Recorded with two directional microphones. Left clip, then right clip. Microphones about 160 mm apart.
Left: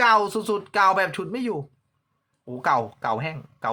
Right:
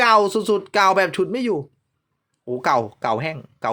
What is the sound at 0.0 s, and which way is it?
Speech, 35° right (ahead or behind).